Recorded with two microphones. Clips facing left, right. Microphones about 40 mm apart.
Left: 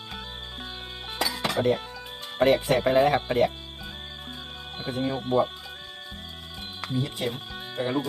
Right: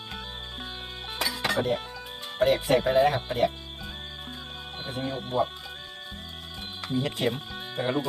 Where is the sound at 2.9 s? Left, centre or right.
Left.